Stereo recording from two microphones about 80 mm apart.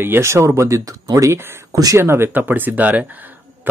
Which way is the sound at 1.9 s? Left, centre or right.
Right.